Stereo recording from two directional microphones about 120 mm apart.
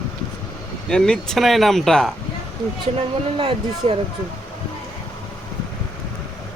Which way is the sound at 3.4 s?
50° right (ahead or behind).